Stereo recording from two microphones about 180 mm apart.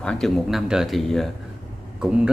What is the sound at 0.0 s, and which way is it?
A man's voice, 5° left (ahead or behind).